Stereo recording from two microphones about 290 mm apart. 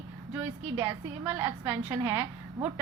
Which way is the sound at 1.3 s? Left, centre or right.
Centre.